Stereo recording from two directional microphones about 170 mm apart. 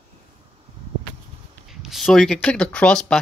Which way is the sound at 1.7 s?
Centre (ahead or behind).